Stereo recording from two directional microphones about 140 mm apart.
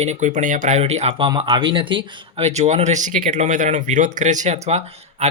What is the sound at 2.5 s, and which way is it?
Speech, 55° right (ahead or behind).